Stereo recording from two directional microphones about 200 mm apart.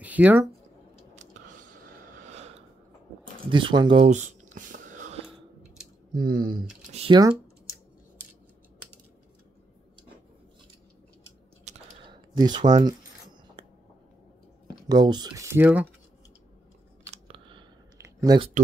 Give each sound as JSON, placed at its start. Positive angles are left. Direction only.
{"t": 0.0, "sound": "a sound", "side_deg": -10}
{"t": 1.1, "sound": "a sound", "side_deg": -40}
{"t": 6.1, "sound": "speech", "side_deg": -45}
{"t": 6.9, "sound": "computer keyboard", "side_deg": -30}
{"t": 11.6, "sound": "typing", "side_deg": -35}
{"t": 14.9, "sound": "speech", "side_deg": -20}
{"t": 17.1, "sound": "chewing", "side_deg": -25}
{"t": 18.2, "sound": "speech", "side_deg": -20}